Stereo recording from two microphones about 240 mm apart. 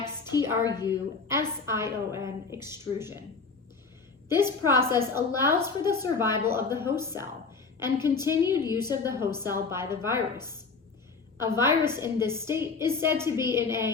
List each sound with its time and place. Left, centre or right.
0.6 s a woman's voice: centre
0.9 s a woman's voice: centre
4.4 s a woman's voice: centre
11.3 s a woman's voice: centre